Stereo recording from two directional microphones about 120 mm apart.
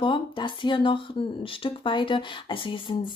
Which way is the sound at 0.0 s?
45° left (ahead or behind).